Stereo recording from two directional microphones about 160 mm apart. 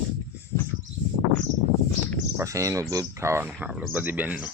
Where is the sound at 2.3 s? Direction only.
20° right (ahead or behind).